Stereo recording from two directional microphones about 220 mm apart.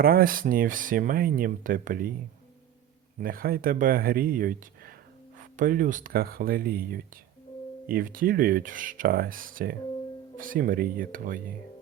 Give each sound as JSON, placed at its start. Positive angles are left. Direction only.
{"t": 0.0, "sound": "speech", "side_deg": -40}
{"t": 3.2, "sound": "speech", "side_deg": -40}